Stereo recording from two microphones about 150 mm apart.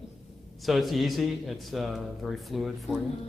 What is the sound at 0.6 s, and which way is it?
A man's voice, centre (ahead or behind).